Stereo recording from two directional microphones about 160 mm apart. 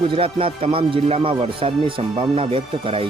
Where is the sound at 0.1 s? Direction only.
35° right (ahead or behind).